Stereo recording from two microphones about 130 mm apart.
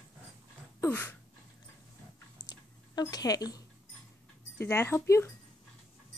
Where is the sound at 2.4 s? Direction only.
30° left (ahead or behind).